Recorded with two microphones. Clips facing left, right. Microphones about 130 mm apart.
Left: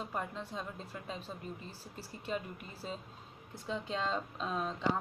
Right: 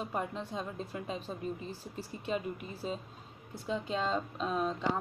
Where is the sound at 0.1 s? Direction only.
15° right (ahead or behind).